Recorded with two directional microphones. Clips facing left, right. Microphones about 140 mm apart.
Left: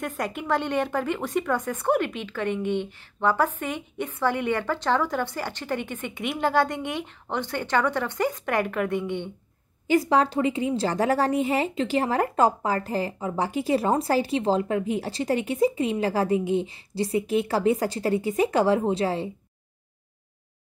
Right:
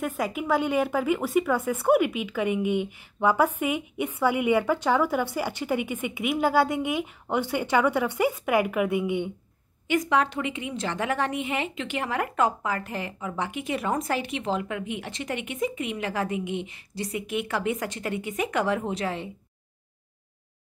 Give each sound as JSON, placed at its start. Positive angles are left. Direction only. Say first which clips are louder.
{"t": 0.0, "sound": "speech", "louder": "right 2 dB", "side_deg": -5}
{"t": 9.8, "sound": "a woman's voice", "louder": "left 3 dB", "side_deg": 35}